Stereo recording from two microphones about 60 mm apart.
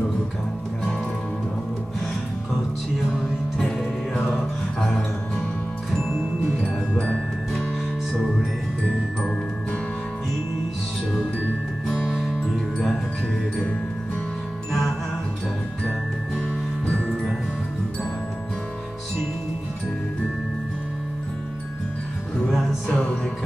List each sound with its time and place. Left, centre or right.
3.6 s music: centre
8.8 s music: centre
11.9 s music: centre
22.8 s music: left